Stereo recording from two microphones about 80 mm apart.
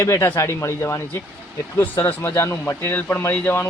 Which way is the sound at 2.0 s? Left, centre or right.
Left.